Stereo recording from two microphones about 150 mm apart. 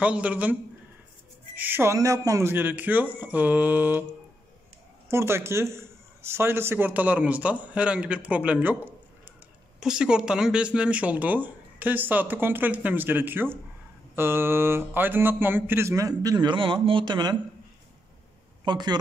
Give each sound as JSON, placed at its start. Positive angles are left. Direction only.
{"t": 0.0, "sound": "speech", "side_deg": -10}
{"t": 5.0, "sound": "speech", "side_deg": -15}
{"t": 9.8, "sound": "speech", "side_deg": -5}
{"t": 18.6, "sound": "a man's voice", "side_deg": -30}